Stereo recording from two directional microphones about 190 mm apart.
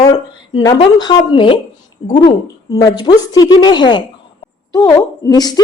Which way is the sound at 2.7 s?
20° left (ahead or behind).